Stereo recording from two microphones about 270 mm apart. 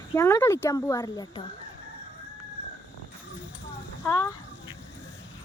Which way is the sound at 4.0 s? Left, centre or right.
Centre.